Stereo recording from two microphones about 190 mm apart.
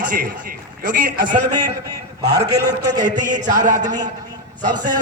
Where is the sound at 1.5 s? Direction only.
20° right (ahead or behind).